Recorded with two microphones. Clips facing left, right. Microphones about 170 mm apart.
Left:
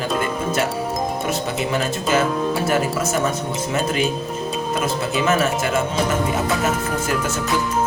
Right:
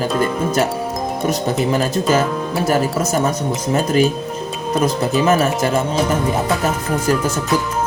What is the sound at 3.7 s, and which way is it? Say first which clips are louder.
Speech: right 6 dB; 40° right (ahead or behind).